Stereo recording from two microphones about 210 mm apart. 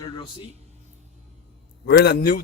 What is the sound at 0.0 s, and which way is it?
Speech, 25° left (ahead or behind).